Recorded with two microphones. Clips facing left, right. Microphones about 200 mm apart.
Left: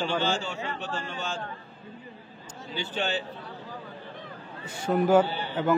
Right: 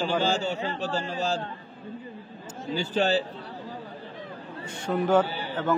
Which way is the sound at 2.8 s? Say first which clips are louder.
Right 6 dB; 40° right (ahead or behind).